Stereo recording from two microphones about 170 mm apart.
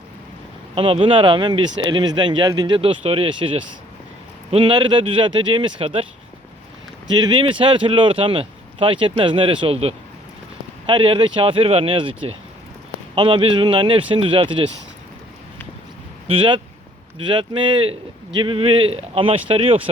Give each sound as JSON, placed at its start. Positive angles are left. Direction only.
{"t": 0.8, "sound": "speech", "side_deg": -30}
{"t": 7.1, "sound": "speech", "side_deg": -25}
{"t": 16.2, "sound": "speech", "side_deg": -30}